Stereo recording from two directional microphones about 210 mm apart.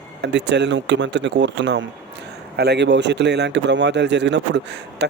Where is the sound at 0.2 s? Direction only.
55° right (ahead or behind).